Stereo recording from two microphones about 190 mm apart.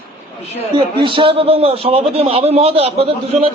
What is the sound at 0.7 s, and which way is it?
A man's voice, 30° right (ahead or behind).